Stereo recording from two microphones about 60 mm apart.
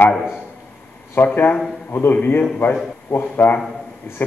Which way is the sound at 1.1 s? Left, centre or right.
Left.